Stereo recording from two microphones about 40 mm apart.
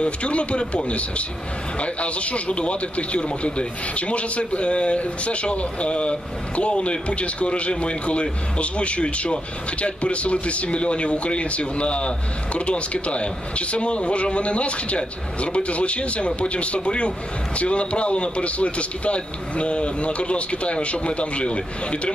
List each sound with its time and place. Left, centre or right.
0.0 s a man's voice: left